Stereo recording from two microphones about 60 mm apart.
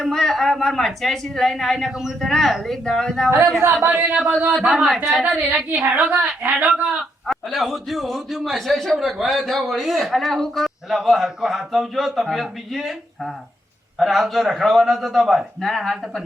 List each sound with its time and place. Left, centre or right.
0.0 s a man's voice: centre
3.2 s speech: right
3.8 s a woman's voice: right
4.1 s music: centre
4.5 s a man's voice: centre
5.2 s a woman's voice: right
7.3 s a man's voice: centre